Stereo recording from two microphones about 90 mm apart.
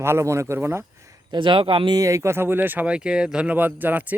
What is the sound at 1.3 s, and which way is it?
Speech, 65° right (ahead or behind).